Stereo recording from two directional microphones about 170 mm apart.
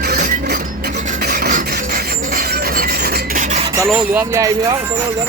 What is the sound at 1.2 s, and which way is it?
Rub, 65° right (ahead or behind).